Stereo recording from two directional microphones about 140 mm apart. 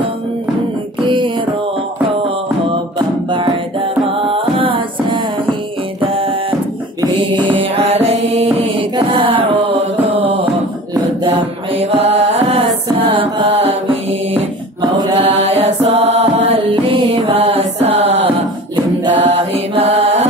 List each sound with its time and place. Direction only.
1.0 s music: 35° right (ahead or behind)
4.2 s music: 40° right (ahead or behind)
7.5 s music: 45° right (ahead or behind)
8.7 s mantra: 40° right (ahead or behind)
11.2 s mantra: 45° right (ahead or behind)
12.8 s music: 40° right (ahead or behind)
15.1 s mantra: 45° right (ahead or behind)
16.7 s music: 40° right (ahead or behind)
19.1 s mantra: 45° right (ahead or behind)